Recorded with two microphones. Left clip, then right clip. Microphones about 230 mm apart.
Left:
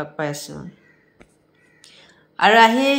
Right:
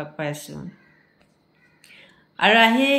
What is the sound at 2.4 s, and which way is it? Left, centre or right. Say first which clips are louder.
Speech: left 3 dB; centre.